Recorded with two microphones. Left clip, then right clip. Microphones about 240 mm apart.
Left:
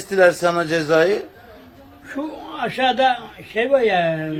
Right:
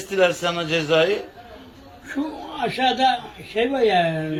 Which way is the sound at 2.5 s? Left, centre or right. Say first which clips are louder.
Left 2 dB; centre.